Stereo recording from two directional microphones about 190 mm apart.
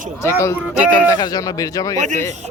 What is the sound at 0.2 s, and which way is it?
A man's voice, 15° left (ahead or behind).